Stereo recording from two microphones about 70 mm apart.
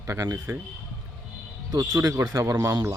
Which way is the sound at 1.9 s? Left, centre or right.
Right.